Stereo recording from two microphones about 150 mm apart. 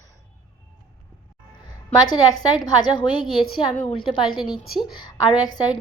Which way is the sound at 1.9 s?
25° left (ahead or behind).